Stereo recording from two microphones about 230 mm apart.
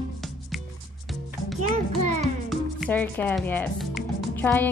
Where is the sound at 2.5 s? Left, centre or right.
Centre.